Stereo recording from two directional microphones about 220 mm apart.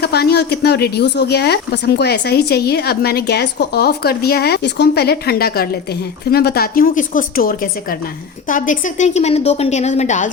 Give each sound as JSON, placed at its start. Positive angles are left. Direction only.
{"t": 0.0, "sound": "a woman's voice", "side_deg": 45}